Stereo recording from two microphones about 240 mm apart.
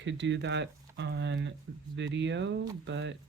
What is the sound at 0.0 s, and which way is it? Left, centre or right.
Speech, right.